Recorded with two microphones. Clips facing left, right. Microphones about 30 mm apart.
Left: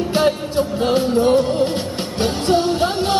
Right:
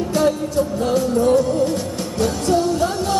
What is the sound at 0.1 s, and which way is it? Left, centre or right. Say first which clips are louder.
Music: even; left.